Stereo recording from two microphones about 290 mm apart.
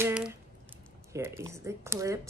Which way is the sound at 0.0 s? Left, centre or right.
Centre.